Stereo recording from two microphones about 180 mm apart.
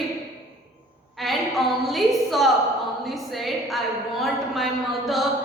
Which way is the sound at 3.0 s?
Centre (ahead or behind).